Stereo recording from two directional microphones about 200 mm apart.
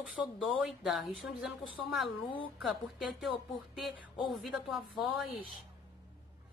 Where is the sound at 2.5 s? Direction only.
5° right (ahead or behind).